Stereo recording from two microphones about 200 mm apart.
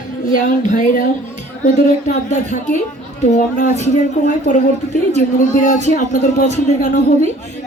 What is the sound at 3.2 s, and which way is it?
Speech, 35° left (ahead or behind).